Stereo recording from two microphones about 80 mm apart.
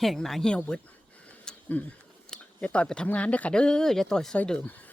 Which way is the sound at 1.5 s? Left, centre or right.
Centre.